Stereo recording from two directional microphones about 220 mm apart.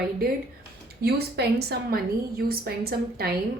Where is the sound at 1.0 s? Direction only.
50° right (ahead or behind).